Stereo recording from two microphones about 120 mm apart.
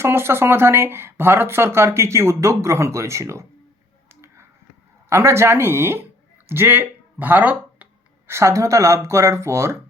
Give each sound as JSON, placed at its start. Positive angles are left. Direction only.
{"t": 0.0, "sound": "speech", "side_deg": -20}
{"t": 4.1, "sound": "finger snapping", "side_deg": -25}
{"t": 5.0, "sound": "speech", "side_deg": -20}